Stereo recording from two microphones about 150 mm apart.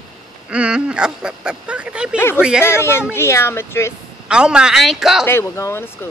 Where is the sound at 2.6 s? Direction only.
15° left (ahead or behind).